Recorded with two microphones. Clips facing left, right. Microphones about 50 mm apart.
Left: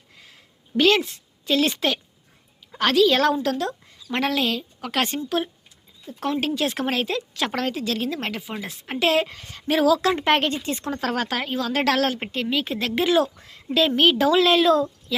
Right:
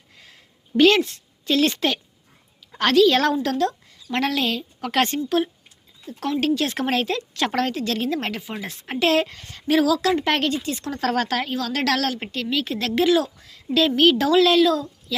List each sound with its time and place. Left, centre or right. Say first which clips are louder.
0.8 s a woman's voice: right 3 dB; centre; by 10.9 s left
10.9 s a woman's voice: right 4 dB; centre; by 13.7 s left
13.7 s a woman's voice: right 1 dB; centre